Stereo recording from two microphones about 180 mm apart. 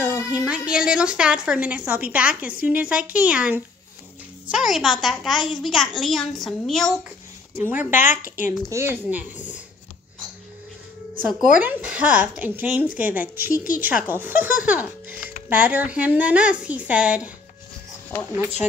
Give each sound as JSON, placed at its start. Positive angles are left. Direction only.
{"t": 0.3, "sound": "a woman's voice", "side_deg": -5}
{"t": 7.5, "sound": "a woman's voice", "side_deg": -10}
{"t": 8.2, "sound": "speech", "side_deg": 50}
{"t": 8.7, "sound": "a woman's voice", "side_deg": -15}
{"t": 11.1, "sound": "a child's voice", "side_deg": 0}
{"t": 18.3, "sound": "a woman's voice", "side_deg": -10}